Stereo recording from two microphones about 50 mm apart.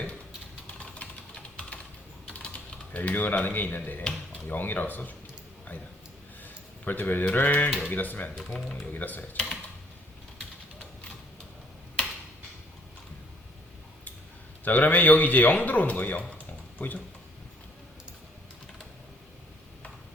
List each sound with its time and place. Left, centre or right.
0.8 s a sound: left
2.2 s typing: centre
2.9 s speech: left
6.4 s a sound: left
7.3 s speech: left
14.6 s speech: left